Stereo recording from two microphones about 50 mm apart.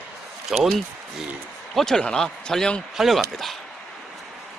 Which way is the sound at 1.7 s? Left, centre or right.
Centre.